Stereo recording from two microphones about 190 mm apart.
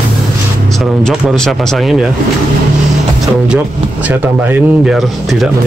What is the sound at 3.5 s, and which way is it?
Speech, 10° right (ahead or behind).